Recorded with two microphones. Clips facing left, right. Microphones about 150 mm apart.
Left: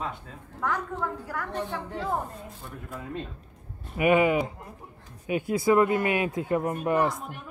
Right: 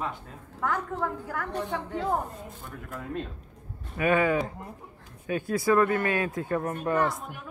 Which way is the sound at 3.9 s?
15° left (ahead or behind).